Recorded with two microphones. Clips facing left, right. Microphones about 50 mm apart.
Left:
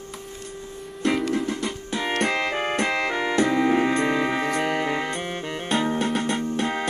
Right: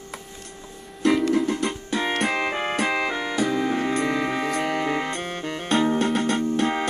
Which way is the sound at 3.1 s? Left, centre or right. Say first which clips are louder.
Left 3 dB; centre.